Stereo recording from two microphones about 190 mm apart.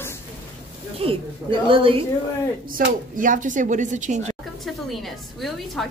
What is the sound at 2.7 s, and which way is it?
Speech, 45° right (ahead or behind).